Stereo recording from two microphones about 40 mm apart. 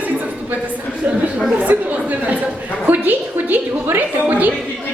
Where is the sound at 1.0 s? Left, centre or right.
Right.